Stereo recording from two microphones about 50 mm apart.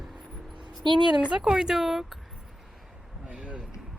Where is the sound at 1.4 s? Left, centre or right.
Centre.